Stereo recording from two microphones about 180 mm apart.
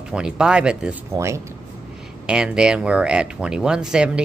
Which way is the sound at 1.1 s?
15° right (ahead or behind).